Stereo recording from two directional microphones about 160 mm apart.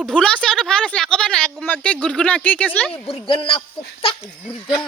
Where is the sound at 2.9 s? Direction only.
35° left (ahead or behind).